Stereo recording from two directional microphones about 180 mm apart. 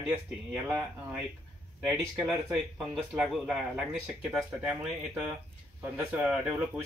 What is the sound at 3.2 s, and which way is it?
Speech, 5° right (ahead or behind).